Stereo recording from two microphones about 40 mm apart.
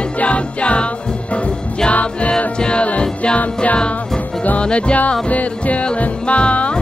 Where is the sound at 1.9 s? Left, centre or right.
Left.